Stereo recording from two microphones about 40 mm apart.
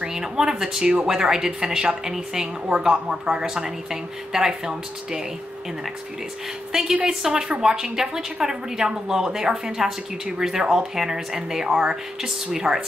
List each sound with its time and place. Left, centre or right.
0.0 s a woman's voice: centre
6.7 s a woman's voice: centre